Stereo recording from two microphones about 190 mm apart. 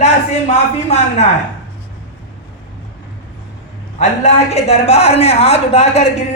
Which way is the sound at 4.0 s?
35° left (ahead or behind).